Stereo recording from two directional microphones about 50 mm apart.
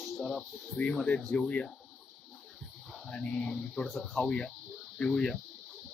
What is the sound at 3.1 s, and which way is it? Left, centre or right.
Speech, left.